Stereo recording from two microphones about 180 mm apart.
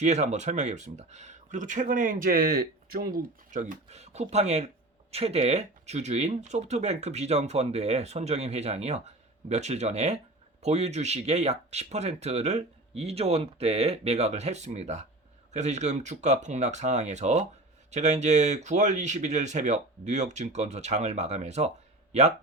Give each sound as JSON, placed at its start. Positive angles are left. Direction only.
{"t": 0.0, "sound": "speech", "side_deg": -40}